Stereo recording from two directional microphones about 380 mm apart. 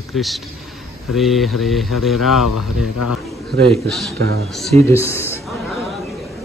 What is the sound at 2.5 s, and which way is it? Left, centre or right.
Speech, left.